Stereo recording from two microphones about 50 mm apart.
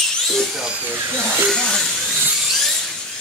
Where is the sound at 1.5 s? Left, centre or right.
Centre.